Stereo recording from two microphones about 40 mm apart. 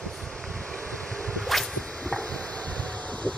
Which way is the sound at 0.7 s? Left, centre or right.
Left.